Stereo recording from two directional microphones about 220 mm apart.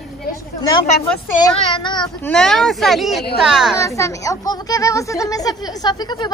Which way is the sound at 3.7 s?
15° left (ahead or behind).